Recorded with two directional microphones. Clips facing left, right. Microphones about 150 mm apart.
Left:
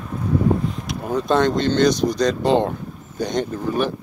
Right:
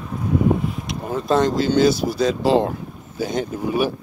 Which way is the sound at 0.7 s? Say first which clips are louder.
Left 2 dB; centre (ahead or behind).